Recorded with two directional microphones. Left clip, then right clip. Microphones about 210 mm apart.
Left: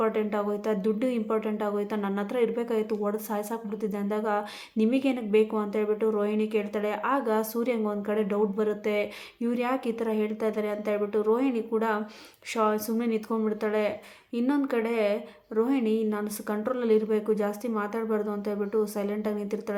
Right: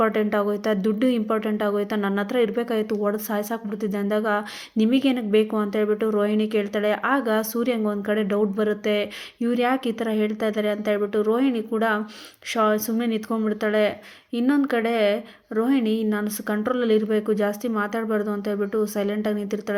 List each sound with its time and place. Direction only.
0.0 s speech: 25° right (ahead or behind)